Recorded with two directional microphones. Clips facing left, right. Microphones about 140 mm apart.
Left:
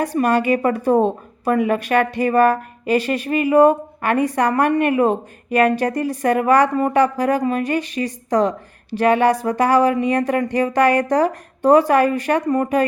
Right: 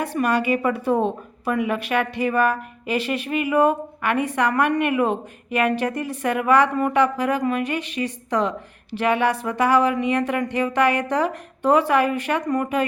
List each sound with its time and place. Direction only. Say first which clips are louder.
0.0 s speech: left 4 dB; 40° left (ahead or behind)